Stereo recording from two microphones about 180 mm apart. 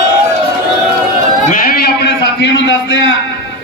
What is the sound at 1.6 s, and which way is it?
A man's voice, 55° left (ahead or behind).